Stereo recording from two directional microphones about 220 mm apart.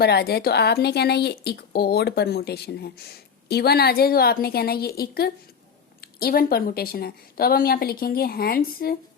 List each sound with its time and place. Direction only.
0.0 s a woman's voice: 45° left (ahead or behind)